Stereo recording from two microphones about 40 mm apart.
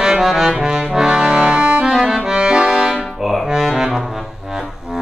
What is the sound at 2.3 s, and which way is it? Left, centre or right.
Accordion, right.